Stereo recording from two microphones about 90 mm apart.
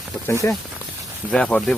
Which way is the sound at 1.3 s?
10° left (ahead or behind).